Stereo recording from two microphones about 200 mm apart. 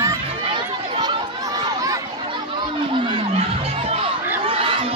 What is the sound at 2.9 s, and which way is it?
Crowd, 25° right (ahead or behind).